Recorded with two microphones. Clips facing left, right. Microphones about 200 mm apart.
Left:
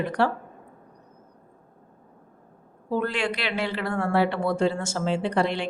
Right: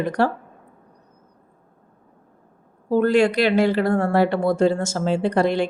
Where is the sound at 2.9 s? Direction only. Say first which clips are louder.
Right 9 dB; 40° right (ahead or behind).